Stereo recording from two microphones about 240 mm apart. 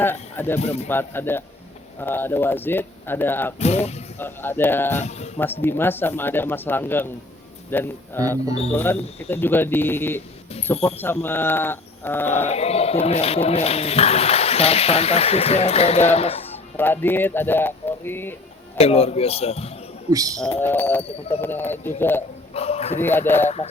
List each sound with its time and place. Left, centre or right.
0.0 s speech: centre
0.6 s speech: left
0.9 s speech: centre
3.6 s speech: left
4.2 s speech: centre
5.0 s speech: left
5.6 s speech: centre
12.5 s speech: left
16.7 s speech: centre
18.8 s speech: left
20.1 s speech: centre
20.6 s speech: centre
22.5 s speech: left
23.0 s speech: centre